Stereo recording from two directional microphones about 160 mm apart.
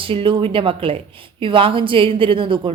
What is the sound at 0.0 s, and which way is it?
A woman's voice, 35° right (ahead or behind).